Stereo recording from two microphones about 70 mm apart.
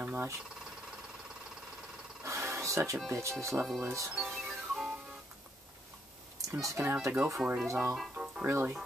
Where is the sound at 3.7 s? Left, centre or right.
Centre.